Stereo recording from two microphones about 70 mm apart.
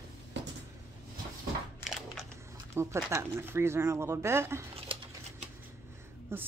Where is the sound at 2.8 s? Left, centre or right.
Right.